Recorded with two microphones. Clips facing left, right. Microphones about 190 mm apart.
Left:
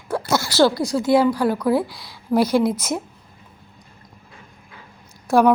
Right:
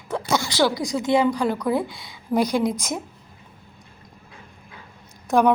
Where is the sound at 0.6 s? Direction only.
15° right (ahead or behind).